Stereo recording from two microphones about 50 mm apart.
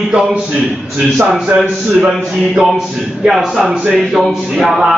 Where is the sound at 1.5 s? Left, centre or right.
Right.